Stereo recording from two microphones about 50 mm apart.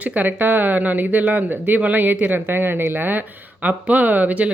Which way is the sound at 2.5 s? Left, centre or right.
Right.